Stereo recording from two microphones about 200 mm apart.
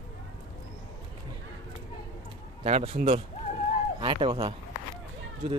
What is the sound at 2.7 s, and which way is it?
Speech, 30° right (ahead or behind).